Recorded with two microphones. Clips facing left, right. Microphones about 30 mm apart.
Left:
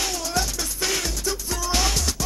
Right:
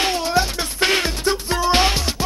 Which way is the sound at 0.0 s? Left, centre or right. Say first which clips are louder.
Right 7 dB; right.